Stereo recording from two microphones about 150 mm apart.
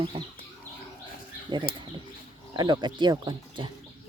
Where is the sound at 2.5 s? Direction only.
30° right (ahead or behind).